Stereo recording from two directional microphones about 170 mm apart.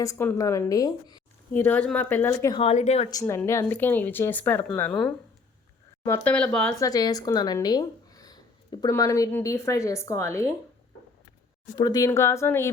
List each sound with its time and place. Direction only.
0.0 s speech: 15° left (ahead or behind)
1.5 s speech: 10° left (ahead or behind)
2.5 s speech: 35° left (ahead or behind)
3.1 s speech: 20° left (ahead or behind)
6.7 s speech: 20° left (ahead or behind)
11.8 s speech: 20° left (ahead or behind)